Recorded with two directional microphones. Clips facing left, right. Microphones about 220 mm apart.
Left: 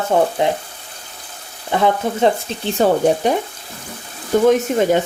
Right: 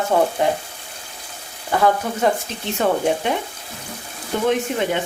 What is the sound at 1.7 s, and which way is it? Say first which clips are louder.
Speech: left 1 dB; 20° left (ahead or behind).